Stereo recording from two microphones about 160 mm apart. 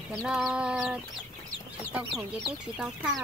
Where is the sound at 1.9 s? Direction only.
10° right (ahead or behind).